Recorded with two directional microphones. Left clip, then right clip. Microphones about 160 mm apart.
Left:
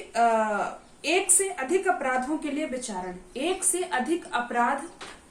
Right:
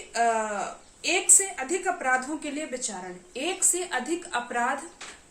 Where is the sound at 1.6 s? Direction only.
20° right (ahead or behind).